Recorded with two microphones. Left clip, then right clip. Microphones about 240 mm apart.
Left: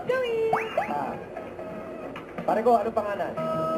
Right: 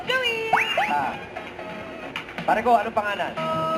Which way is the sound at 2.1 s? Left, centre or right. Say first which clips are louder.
Right 4 dB; centre.